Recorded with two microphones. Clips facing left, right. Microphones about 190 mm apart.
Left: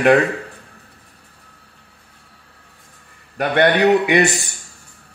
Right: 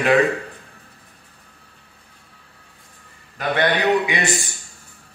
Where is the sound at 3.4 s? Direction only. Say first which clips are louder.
Left 5 dB; 60° left (ahead or behind).